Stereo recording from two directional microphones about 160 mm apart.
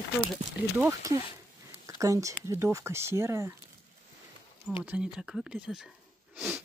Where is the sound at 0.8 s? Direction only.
20° right (ahead or behind).